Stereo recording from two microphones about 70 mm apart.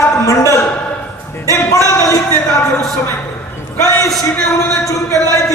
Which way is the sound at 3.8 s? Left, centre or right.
Left.